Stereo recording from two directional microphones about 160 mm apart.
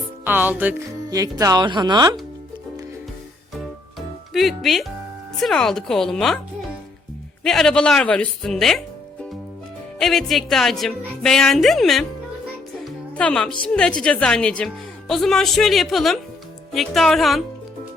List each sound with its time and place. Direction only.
0.3 s speech: 10° right (ahead or behind)
3.9 s music: centre (ahead or behind)
5.4 s a woman's voice: centre (ahead or behind)
7.4 s a woman's voice: centre (ahead or behind)
10.0 s a woman's voice: centre (ahead or behind)